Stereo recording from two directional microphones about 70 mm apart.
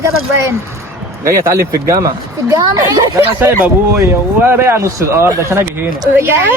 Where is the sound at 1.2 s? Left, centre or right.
Right.